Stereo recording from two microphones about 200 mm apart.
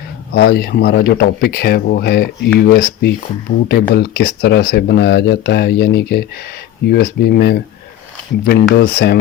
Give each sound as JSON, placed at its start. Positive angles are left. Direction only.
{"t": 0.3, "sound": "speech", "side_deg": 55}